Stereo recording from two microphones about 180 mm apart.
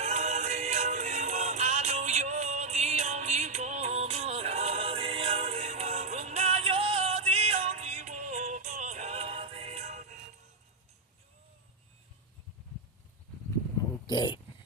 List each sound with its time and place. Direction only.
0.0 s music: 40° right (ahead or behind)
14.1 s dog: 25° left (ahead or behind)